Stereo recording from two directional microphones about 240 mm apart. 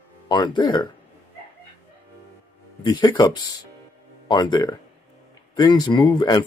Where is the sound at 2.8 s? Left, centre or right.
Centre.